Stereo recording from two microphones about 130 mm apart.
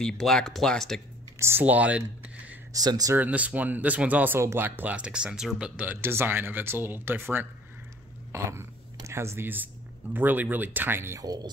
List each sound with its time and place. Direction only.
0.0 s speech: 5° left (ahead or behind)
1.4 s speech: 15° right (ahead or behind)
2.7 s speech: 30° right (ahead or behind)
3.2 s speech: 10° right (ahead or behind)
8.3 s a sound: 20° right (ahead or behind)
10.1 s speech: 15° right (ahead or behind); by 11.5 s 30° right (ahead or behind)